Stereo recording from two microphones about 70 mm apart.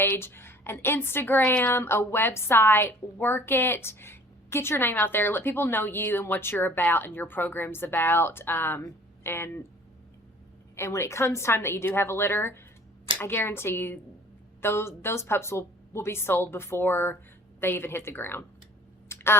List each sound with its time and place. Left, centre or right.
0.0 s a woman's voice: left
10.8 s a woman's voice: left
19.0 s a sound: left